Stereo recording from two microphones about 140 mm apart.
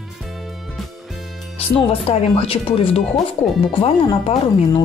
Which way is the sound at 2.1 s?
45° left (ahead or behind).